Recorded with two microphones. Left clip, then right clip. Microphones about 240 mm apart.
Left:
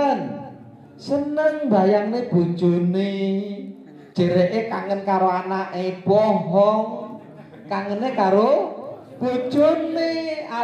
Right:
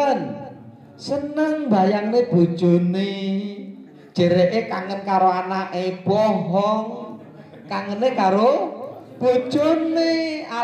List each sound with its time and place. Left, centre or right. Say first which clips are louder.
1.0 s speech: left 2 dB; right